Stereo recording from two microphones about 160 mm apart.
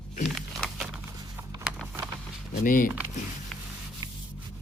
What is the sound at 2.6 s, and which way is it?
Speech, 60° left (ahead or behind).